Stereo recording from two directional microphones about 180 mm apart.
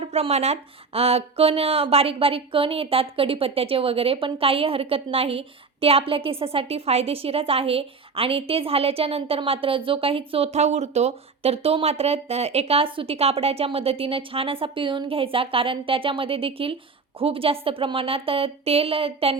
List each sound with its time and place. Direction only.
0.0 s speech: 35° right (ahead or behind)